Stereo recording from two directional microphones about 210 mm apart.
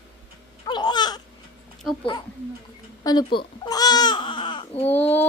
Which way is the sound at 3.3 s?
20° left (ahead or behind).